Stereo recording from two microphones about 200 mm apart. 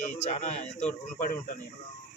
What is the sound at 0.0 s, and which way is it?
Speech, 35° left (ahead or behind).